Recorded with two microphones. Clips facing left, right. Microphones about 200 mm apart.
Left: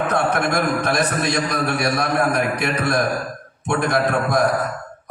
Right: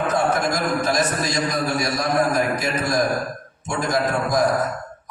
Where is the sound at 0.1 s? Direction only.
60° left (ahead or behind).